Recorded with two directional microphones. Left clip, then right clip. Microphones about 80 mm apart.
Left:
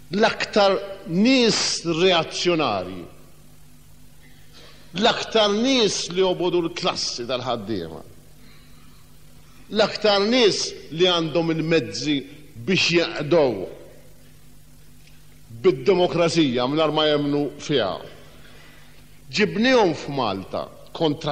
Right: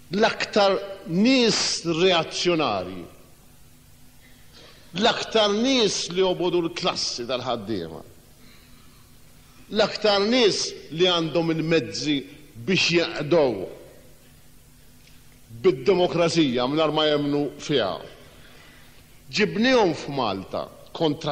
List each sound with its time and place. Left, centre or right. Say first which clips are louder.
0.1 s a man's voice: left 2 dB; right
4.6 s a man's voice: left 1 dB; right
9.7 s a man's voice: left 2 dB; right
15.6 s a man's voice: left 2 dB; right